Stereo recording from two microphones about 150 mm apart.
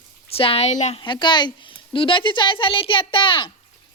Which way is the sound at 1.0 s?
30° left (ahead or behind).